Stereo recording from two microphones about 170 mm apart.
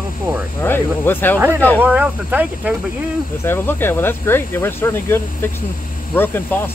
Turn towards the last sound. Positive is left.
turn(degrees=10)  # may be behind; listen again after turning